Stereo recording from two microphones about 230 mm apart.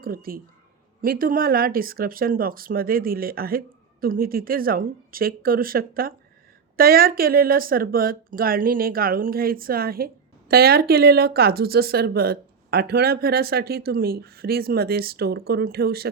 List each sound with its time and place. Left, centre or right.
0.0 s speech: right